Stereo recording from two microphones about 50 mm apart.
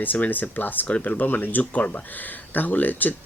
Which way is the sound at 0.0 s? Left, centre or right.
Left.